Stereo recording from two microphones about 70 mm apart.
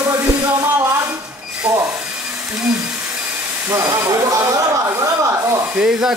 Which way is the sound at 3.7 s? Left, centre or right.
Right.